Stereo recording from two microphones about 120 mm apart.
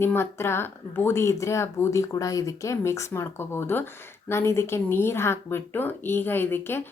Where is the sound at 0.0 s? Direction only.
20° left (ahead or behind).